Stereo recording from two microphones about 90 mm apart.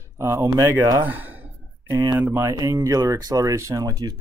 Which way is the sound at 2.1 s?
20° right (ahead or behind).